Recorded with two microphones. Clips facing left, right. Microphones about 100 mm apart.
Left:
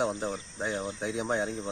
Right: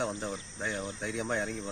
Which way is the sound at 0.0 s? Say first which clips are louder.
Left 4 dB; 25° left (ahead or behind).